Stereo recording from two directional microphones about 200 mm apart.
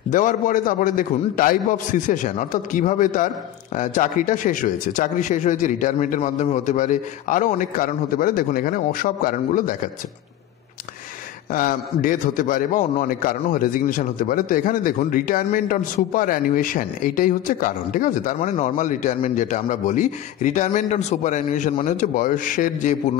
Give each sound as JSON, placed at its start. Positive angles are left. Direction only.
{"t": 0.1, "sound": "a man's voice", "side_deg": 40}
{"t": 11.5, "sound": "a man's voice", "side_deg": 45}